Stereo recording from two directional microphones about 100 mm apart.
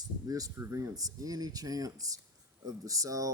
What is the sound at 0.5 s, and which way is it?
Speech, 25° right (ahead or behind).